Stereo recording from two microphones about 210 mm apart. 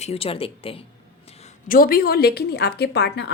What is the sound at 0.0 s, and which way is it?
Speech, 30° left (ahead or behind).